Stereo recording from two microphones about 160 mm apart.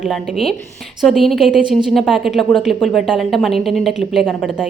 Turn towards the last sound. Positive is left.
turn(degrees=0)  # may be behind; listen again after turning